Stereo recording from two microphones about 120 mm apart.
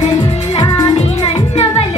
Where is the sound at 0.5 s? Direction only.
35° left (ahead or behind).